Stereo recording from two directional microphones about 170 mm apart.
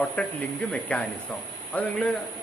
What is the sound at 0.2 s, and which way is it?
Speech, 5° left (ahead or behind).